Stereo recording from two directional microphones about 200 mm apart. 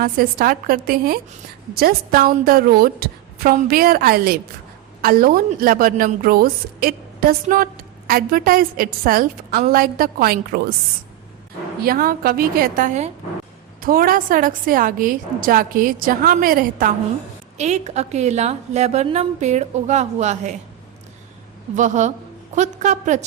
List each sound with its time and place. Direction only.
0.0 s a woman's voice: 45° right (ahead or behind)
11.8 s a woman's voice: 45° right (ahead or behind)
17.6 s a woman's voice: 35° right (ahead or behind)
21.8 s a woman's voice: 35° right (ahead or behind)